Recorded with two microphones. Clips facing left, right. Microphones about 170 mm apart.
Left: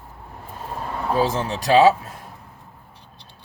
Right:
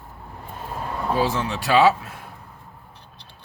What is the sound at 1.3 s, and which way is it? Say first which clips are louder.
Speech: left 5 dB; 40° left (ahead or behind).